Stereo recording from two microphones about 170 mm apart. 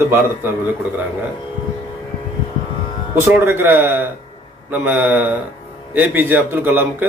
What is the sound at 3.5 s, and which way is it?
Speech, 15° right (ahead or behind).